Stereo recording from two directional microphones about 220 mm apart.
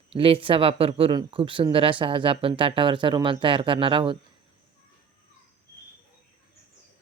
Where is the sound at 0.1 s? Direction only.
25° right (ahead or behind).